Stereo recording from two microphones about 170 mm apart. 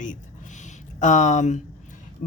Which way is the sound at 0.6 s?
45° left (ahead or behind).